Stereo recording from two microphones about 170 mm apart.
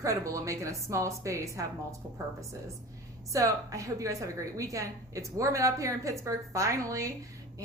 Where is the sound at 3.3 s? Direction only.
20° right (ahead or behind).